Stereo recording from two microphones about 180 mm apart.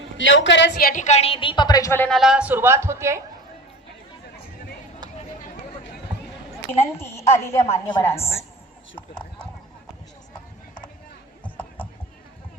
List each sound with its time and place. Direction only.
0.2 s a woman's voice: 90° left
0.9 s a woman's voice: 40° left (ahead or behind); by 2.0 s 15° left (ahead or behind)
2.0 s speech: centre (ahead or behind)
6.9 s a woman's voice: 15° left (ahead or behind)
9.0 s a sound: 5° left (ahead or behind)
11.4 s a sound: 10° left (ahead or behind)